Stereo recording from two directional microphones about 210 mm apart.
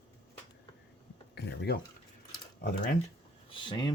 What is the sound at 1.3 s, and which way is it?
Speech, 55° left (ahead or behind).